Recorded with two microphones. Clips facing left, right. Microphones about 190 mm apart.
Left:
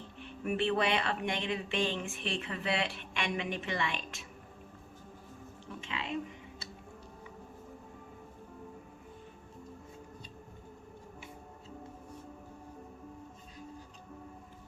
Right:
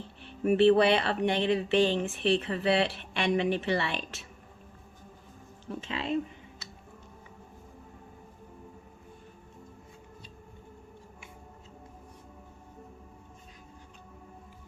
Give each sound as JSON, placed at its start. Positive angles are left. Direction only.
{"t": 0.2, "sound": "speech", "side_deg": -35}
{"t": 5.8, "sound": "speech", "side_deg": -35}